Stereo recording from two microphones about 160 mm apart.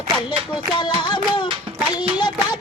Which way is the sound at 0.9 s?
25° left (ahead or behind).